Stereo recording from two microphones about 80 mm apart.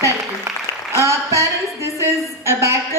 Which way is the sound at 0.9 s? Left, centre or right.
Right.